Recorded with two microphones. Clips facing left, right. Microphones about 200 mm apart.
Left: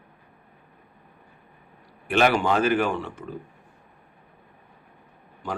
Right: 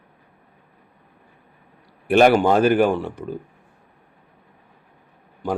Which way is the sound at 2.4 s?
45° right (ahead or behind).